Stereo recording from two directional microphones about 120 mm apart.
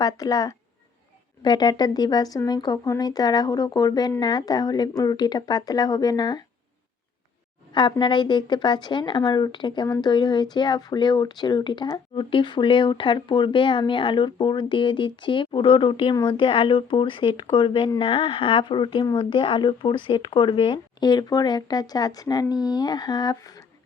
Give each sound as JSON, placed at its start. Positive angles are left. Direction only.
{"t": 0.0, "sound": "a woman's voice", "side_deg": 30}
{"t": 7.7, "sound": "a woman's voice", "side_deg": 40}